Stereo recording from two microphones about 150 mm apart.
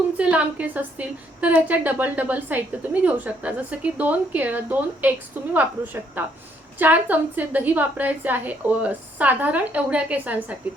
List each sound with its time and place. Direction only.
0.2 s a woman's voice: 10° right (ahead or behind)